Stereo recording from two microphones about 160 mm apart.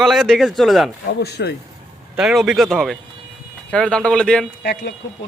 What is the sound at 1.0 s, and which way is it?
Speech, 90° left.